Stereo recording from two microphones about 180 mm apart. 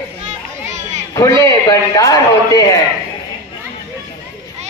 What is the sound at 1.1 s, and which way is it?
A man's voice, 15° left (ahead or behind).